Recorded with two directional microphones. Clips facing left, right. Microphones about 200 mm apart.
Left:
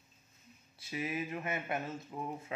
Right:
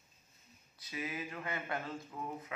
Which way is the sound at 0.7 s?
25° left (ahead or behind).